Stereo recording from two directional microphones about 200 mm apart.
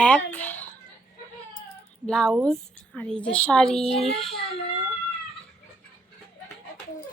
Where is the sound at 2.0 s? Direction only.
5° left (ahead or behind).